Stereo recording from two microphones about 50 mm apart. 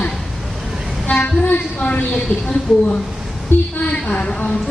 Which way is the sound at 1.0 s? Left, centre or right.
Left.